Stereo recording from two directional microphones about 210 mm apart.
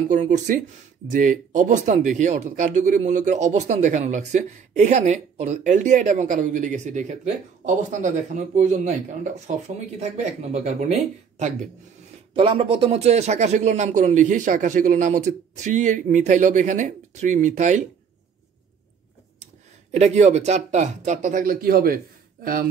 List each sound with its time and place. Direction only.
0.1 s speech: 35° right (ahead or behind)
19.4 s speech: 30° right (ahead or behind)